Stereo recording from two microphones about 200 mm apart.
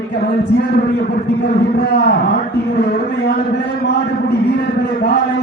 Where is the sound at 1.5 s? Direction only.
55° left (ahead or behind).